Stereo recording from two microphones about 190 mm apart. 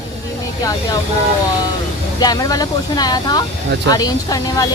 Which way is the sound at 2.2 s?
20° left (ahead or behind).